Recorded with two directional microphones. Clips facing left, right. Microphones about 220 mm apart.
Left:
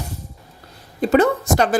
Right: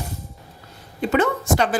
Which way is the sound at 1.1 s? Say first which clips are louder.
Left 4 dB; 40° left (ahead or behind).